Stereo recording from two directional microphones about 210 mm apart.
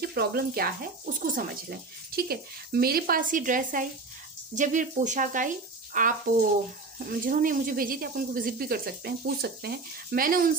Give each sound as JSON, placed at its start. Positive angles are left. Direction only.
{"t": 0.0, "sound": "speech", "side_deg": -50}